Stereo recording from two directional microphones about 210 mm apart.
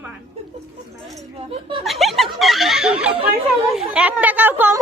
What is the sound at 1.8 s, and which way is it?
Snicker, centre (ahead or behind).